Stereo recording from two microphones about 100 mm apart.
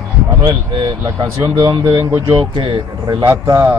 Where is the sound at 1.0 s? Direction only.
30° right (ahead or behind).